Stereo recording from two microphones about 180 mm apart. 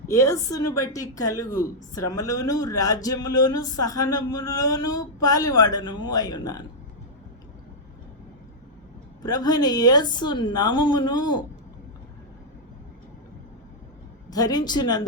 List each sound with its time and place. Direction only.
0.1 s a woman's voice: 15° left (ahead or behind)
9.2 s a woman's voice: 20° left (ahead or behind)
14.3 s a woman's voice: 20° left (ahead or behind)